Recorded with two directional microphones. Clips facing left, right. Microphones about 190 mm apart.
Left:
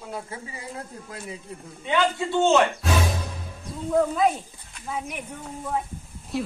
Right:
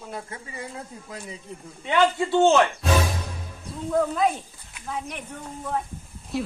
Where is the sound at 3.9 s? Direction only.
Centre (ahead or behind).